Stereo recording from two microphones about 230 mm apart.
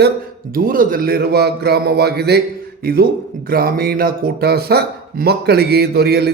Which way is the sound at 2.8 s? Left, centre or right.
Right.